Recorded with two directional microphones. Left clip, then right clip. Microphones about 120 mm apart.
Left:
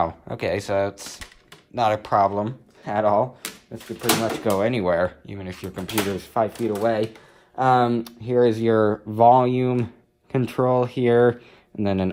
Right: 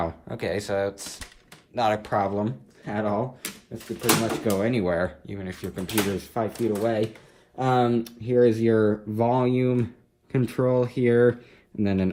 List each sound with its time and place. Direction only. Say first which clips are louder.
0.0 s speech: left 5 dB; 55° left (ahead or behind)
2.0 s speech: left 5 dB; 45° left (ahead or behind)
2.8 s speech: left 7 dB; 65° left (ahead or behind)
3.7 s speech: left 1 dB; 50° left (ahead or behind); by 5.8 s 30° left (ahead or behind)
6.1 s speech: left 5 dB; 50° left (ahead or behind)